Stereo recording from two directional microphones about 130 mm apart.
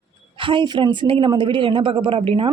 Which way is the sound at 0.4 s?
40° right (ahead or behind).